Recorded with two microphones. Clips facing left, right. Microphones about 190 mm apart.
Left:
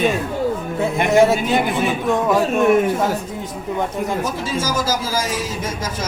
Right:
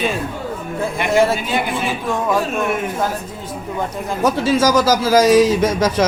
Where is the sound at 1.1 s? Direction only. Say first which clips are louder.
Left 2 dB; 20° left (ahead or behind).